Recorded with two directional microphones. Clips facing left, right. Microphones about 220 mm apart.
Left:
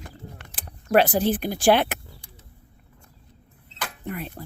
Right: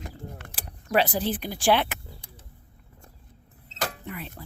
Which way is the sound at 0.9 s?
50° left (ahead or behind).